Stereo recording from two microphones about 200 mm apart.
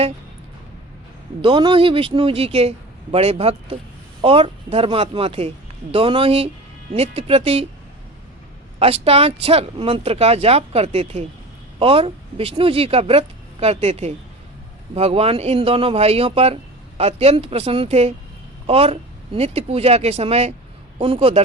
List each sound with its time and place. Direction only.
1.4 s speech: 25° right (ahead or behind)
8.8 s speech: 30° right (ahead or behind)